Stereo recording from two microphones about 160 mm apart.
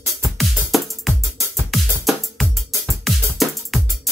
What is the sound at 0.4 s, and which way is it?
Music, centre (ahead or behind).